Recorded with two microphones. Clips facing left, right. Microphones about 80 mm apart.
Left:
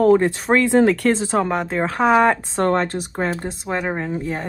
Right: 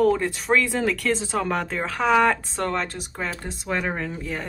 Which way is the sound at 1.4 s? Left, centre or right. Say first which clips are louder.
Left 4 dB; left.